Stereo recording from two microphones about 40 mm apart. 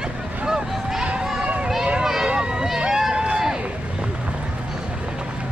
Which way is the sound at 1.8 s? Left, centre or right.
Centre.